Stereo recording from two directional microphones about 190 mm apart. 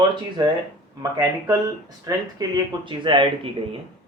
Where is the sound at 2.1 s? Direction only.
25° right (ahead or behind).